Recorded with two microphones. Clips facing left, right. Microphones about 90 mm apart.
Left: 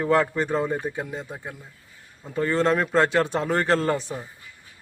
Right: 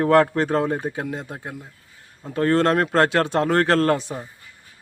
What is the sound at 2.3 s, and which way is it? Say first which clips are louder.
Speech: right 3 dB; 65° right (ahead or behind).